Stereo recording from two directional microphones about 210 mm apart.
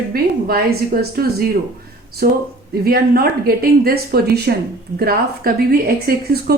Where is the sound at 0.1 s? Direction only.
45° right (ahead or behind).